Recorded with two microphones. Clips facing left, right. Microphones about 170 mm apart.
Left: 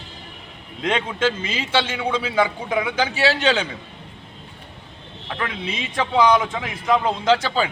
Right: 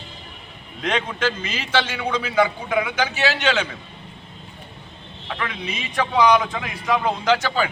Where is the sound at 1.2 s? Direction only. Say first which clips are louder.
Left 2 dB; 25° left (ahead or behind).